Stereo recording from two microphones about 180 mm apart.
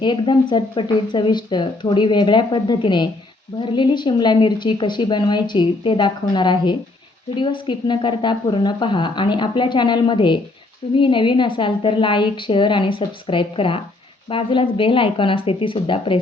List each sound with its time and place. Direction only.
0.0 s a woman's voice: 25° left (ahead or behind)